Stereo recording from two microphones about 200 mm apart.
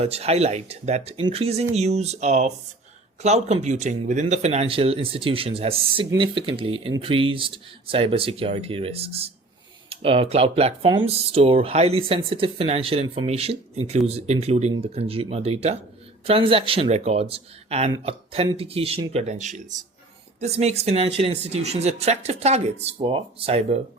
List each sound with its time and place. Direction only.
0.0 s speech: 30° right (ahead or behind)